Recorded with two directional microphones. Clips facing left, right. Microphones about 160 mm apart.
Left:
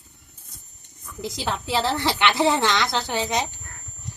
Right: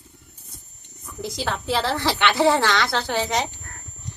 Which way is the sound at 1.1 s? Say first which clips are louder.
Right 3 dB; 5° right (ahead or behind).